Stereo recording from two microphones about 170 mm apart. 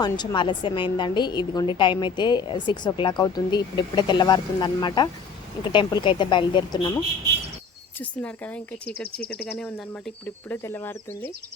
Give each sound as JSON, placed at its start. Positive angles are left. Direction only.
{"t": 0.0, "sound": "a woman's voice", "side_deg": 25}
{"t": 7.9, "sound": "speech", "side_deg": 10}